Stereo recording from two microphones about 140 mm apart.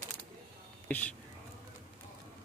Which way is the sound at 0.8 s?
10° left (ahead or behind).